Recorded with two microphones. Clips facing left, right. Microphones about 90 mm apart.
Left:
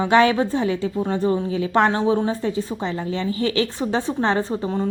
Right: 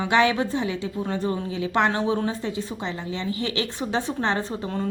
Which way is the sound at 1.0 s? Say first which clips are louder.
Left 5 dB; 25° left (ahead or behind).